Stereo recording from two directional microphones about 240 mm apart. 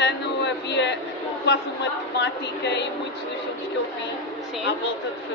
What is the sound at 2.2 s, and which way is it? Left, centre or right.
Speech, left.